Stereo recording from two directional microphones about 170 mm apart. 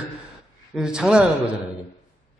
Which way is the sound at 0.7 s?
5° right (ahead or behind).